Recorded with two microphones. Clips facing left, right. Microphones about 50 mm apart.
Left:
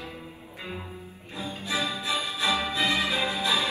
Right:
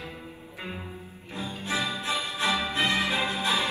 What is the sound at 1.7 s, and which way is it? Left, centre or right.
Music, right.